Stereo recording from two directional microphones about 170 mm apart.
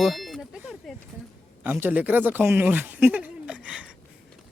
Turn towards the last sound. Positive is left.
turn(degrees=-5)  # may be behind; listen again after turning